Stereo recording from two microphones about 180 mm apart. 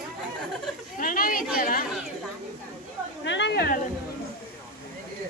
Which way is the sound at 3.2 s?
80° left.